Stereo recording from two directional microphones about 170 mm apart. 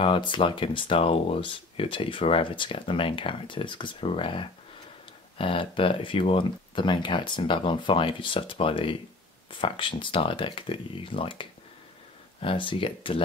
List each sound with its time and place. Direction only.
0.0 s speech: 30° left (ahead or behind)